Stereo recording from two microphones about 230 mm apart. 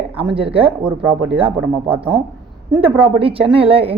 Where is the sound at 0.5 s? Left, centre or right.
Right.